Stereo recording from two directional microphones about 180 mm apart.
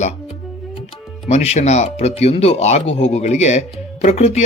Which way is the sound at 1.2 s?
35° left (ahead or behind).